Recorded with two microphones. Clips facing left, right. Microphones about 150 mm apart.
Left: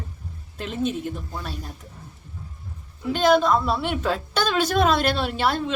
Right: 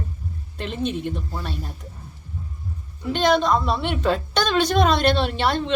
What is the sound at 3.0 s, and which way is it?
A woman's voice, 5° left (ahead or behind).